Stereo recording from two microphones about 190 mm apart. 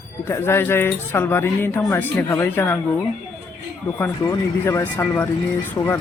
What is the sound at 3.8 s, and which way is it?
Speech, 15° left (ahead or behind).